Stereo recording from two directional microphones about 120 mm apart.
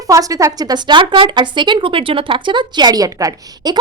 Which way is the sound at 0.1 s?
30° right (ahead or behind).